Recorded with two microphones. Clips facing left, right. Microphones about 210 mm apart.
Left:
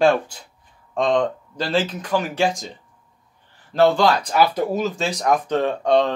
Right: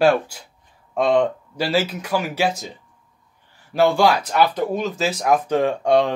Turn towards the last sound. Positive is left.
turn(degrees=-10)  # may be behind; listen again after turning